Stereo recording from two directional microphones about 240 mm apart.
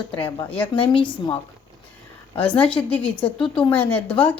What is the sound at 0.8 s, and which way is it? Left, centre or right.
Speech, left.